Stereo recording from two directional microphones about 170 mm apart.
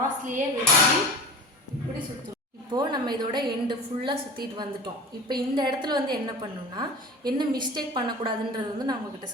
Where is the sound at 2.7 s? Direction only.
25° right (ahead or behind).